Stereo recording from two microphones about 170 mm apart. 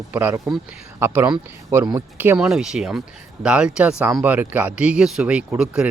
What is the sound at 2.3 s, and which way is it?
Speech, 5° right (ahead or behind).